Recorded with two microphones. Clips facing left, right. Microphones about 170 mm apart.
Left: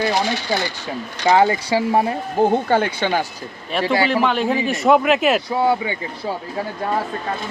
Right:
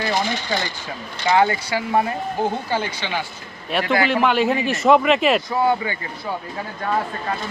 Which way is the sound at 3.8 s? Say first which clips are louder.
Left 2 dB; 30° left (ahead or behind).